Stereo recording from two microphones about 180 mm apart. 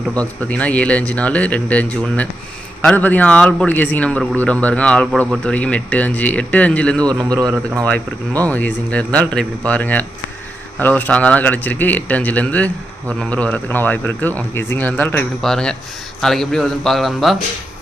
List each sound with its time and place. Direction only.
0.2 s a man's voice: 5° left (ahead or behind)
7.0 s speech: 20° right (ahead or behind)
8.4 s a man's voice: 10° left (ahead or behind)